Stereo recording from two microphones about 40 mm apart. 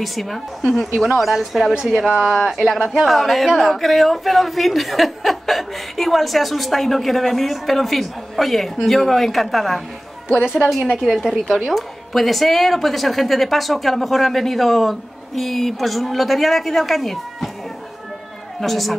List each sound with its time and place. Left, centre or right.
0.0 s a woman's voice: centre
10.4 s a woman's voice: centre
18.6 s a woman's voice: centre